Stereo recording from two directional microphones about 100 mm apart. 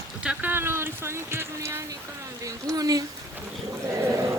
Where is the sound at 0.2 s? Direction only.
15° right (ahead or behind).